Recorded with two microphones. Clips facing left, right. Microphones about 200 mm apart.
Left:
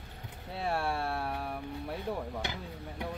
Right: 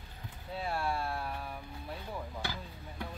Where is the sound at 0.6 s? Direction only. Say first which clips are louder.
Left 3 dB; 70° left (ahead or behind).